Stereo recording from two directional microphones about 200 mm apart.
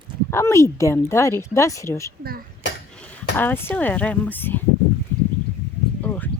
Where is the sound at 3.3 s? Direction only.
10° left (ahead or behind).